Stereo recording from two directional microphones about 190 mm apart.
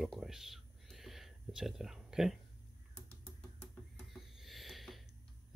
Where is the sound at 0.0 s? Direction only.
Centre (ahead or behind).